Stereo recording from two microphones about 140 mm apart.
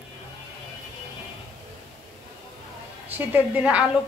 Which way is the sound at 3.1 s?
10° right (ahead or behind).